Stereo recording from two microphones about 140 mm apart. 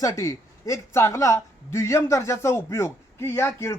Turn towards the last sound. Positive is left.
turn(degrees=20)  # may be behind; listen again after turning